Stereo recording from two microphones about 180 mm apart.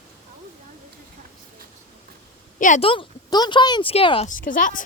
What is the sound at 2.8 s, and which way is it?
A woman's voice, 30° left (ahead or behind).